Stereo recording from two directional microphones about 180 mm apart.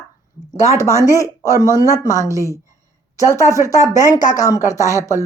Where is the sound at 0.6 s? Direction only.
15° left (ahead or behind).